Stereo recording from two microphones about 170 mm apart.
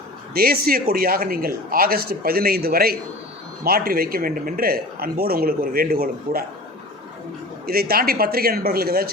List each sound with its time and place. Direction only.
0.3 s speech: 60° right (ahead or behind)
7.7 s speech: 60° right (ahead or behind)